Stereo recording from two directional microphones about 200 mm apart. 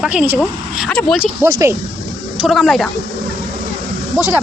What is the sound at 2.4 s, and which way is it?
Speech, centre (ahead or behind).